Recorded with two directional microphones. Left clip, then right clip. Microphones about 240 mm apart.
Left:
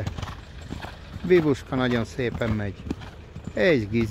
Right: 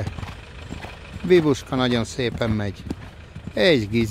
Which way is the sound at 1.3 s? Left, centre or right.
Centre.